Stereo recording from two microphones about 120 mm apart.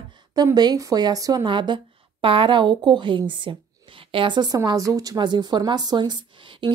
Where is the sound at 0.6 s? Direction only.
35° right (ahead or behind).